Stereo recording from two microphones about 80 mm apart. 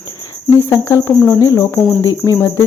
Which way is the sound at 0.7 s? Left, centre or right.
Left.